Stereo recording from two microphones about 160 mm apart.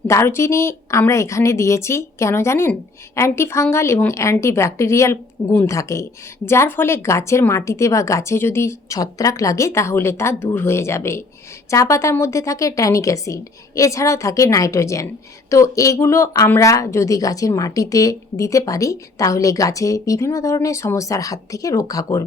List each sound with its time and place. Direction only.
0.1 s a woman's voice: 15° left (ahead or behind)